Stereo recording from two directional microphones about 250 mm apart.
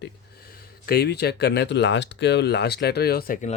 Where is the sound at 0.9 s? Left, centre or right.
Left.